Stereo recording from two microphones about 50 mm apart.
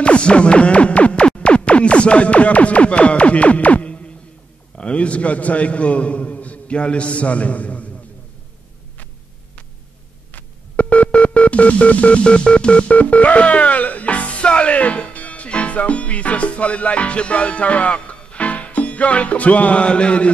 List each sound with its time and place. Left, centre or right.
0.0 s music: left
4.7 s a man's voice: left
10.3 s a sound: left